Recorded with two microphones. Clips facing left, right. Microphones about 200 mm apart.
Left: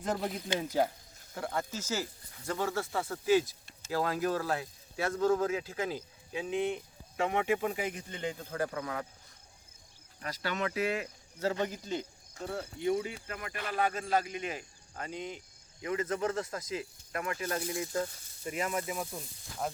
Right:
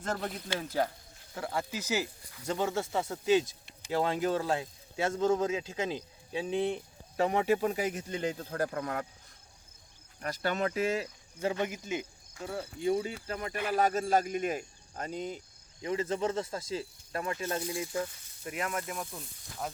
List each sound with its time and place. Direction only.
0.2 s speech: 5° left (ahead or behind)
0.4 s speech: 20° left (ahead or behind)
1.3 s speech: centre (ahead or behind)
1.7 s speech: 15° right (ahead or behind); by 9.0 s 50° right (ahead or behind)
10.2 s speech: 45° right (ahead or behind)
11.3 s speech: 15° right (ahead or behind)
12.8 s speech: 30° right (ahead or behind)
13.7 s speech: 40° right (ahead or behind); by 17.8 s 25° right (ahead or behind)
18.4 s speech: centre (ahead or behind)